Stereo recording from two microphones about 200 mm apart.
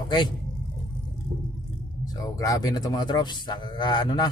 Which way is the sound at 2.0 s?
15° left (ahead or behind).